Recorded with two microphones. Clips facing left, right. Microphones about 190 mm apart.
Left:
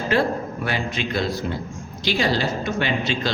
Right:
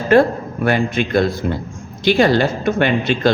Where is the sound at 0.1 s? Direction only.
50° right (ahead or behind).